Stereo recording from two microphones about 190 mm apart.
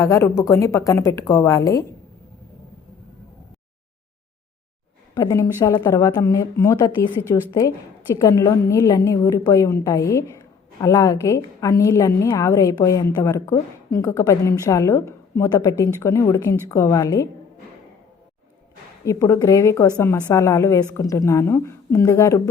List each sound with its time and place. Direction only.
0.0 s a woman's voice: 15° left (ahead or behind)
5.1 s a woman's voice: 20° left (ahead or behind)
19.0 s a woman's voice: 15° left (ahead or behind)